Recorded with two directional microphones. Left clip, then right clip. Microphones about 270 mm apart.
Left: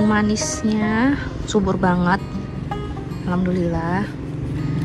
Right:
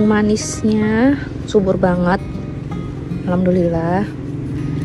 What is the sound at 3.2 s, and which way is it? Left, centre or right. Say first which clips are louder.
Speech: right 7 dB; centre.